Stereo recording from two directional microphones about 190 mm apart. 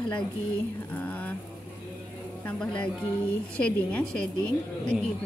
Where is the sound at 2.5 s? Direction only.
5° left (ahead or behind).